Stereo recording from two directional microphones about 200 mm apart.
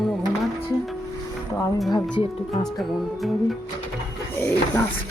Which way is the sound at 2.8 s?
Centre (ahead or behind).